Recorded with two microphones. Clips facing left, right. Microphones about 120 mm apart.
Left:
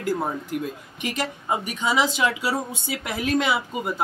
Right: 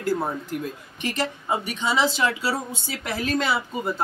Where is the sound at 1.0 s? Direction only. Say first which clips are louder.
Right 1 dB; 10° left (ahead or behind).